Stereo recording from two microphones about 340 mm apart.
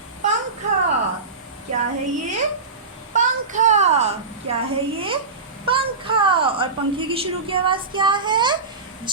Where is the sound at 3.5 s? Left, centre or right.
Right.